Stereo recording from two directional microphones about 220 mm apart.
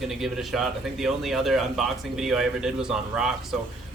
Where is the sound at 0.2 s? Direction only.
Centre (ahead or behind).